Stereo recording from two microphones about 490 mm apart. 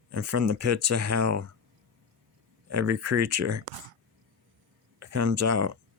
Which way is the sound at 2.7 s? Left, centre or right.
Right.